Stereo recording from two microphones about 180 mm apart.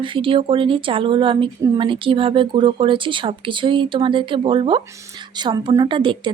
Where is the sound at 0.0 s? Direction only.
30° right (ahead or behind).